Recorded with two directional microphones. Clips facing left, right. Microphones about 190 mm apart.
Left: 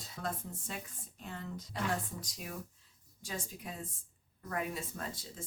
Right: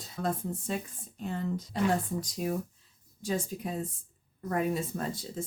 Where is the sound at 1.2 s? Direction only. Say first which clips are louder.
Right 10 dB; 35° right (ahead or behind).